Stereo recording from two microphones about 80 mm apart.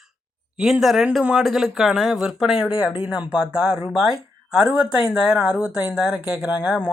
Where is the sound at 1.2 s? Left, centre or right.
Centre.